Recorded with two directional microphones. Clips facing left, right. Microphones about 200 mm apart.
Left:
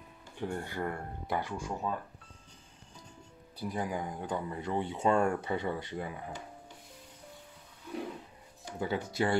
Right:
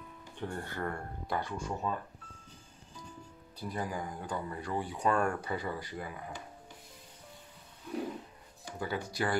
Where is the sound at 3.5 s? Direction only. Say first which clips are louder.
Left 2 dB; 20° left (ahead or behind).